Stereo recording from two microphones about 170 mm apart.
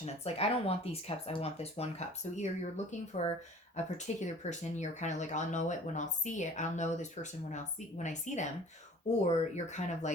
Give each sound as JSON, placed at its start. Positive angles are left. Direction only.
{"t": 0.0, "sound": "speech", "side_deg": 35}